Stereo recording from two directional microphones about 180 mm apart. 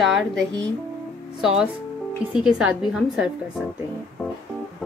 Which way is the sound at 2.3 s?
5° right (ahead or behind).